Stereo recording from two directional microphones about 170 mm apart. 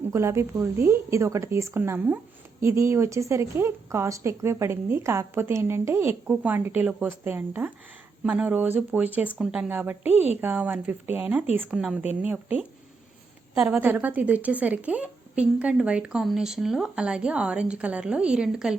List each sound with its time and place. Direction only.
0.1 s a woman's voice: 15° right (ahead or behind)